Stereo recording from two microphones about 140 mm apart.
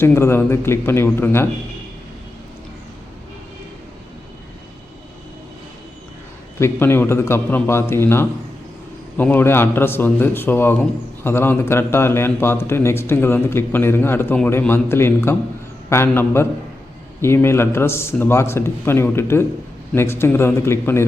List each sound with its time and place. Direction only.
0.0 s a man's voice: 15° left (ahead or behind)
6.6 s a man's voice: 15° left (ahead or behind)